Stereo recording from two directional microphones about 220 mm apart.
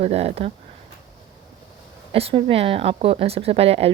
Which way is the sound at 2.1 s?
25° right (ahead or behind).